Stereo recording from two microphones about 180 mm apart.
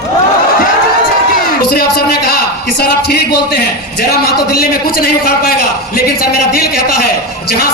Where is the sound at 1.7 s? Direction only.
60° left (ahead or behind).